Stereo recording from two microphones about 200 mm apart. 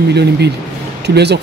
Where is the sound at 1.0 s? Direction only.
55° right (ahead or behind).